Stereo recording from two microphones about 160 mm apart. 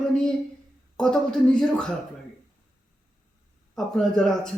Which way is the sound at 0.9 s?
5° left (ahead or behind).